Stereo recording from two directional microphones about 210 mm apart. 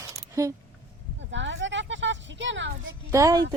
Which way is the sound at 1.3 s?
60° right (ahead or behind).